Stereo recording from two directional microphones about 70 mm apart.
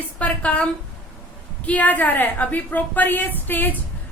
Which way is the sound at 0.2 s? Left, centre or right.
Centre.